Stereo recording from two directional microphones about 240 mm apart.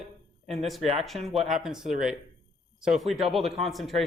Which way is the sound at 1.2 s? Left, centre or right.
Centre.